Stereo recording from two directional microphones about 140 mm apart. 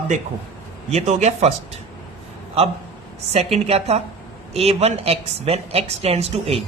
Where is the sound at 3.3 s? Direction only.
45° right (ahead or behind).